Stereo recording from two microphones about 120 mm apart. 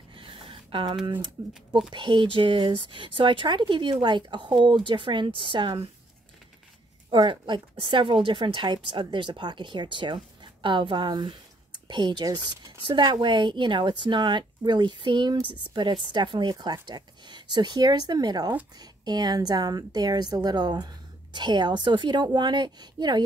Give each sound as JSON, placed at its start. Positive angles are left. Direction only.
{"t": 0.1, "sound": "a sound", "side_deg": -50}
{"t": 1.4, "sound": "a woman's voice", "side_deg": -40}
{"t": 7.1, "sound": "a woman's voice", "side_deg": -40}